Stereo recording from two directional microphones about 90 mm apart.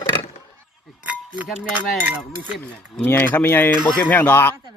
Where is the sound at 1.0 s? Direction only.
15° right (ahead or behind).